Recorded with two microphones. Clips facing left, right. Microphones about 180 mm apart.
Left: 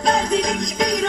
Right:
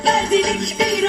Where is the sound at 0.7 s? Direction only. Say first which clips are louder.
Right 1 dB; 5° right (ahead or behind).